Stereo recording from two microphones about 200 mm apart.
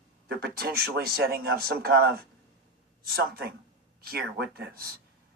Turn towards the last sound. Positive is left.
turn(degrees=-50)  # may be behind; listen again after turning